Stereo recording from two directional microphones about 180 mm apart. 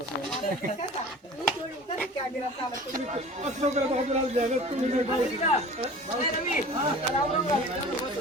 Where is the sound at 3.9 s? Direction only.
40° right (ahead or behind).